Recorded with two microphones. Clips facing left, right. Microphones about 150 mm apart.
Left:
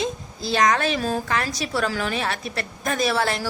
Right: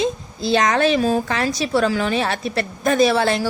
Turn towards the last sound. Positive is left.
turn(degrees=-25)  # may be behind; listen again after turning